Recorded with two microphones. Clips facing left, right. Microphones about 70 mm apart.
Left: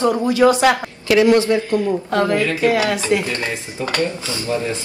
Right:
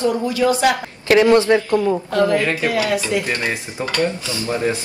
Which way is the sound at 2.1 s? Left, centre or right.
Left.